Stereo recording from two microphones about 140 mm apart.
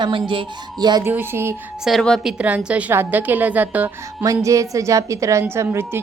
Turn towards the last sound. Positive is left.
turn(degrees=-15)  # may be behind; listen again after turning